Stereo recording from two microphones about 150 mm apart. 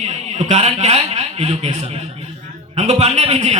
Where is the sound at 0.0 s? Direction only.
50° right (ahead or behind).